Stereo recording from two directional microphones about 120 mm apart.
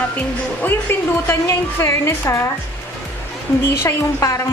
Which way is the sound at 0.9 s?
20° left (ahead or behind).